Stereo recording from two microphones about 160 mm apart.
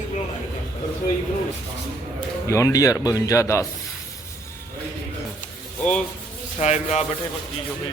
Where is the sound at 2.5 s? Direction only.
20° left (ahead or behind).